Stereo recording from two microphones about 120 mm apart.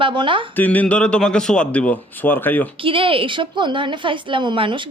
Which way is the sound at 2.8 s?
45° right (ahead or behind).